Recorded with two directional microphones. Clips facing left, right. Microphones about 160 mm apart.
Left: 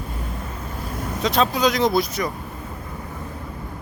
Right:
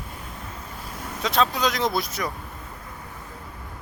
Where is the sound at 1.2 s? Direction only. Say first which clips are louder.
Left 3 dB; centre (ahead or behind).